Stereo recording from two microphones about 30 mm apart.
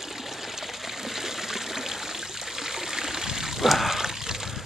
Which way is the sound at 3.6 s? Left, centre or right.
Centre.